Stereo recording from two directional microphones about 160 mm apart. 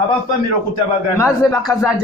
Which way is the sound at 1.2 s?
20° left (ahead or behind).